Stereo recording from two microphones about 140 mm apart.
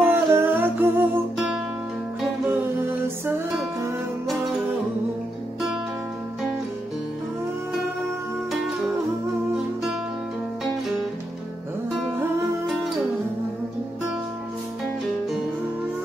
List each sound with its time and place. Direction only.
0.0 s humming: 15° right (ahead or behind)
8.5 s music: centre (ahead or behind)